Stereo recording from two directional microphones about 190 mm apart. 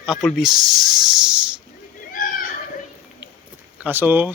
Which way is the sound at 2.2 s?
45° left (ahead or behind).